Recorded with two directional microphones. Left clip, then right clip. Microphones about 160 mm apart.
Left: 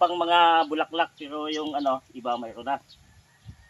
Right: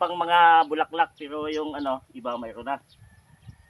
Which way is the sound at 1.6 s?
50° right (ahead or behind).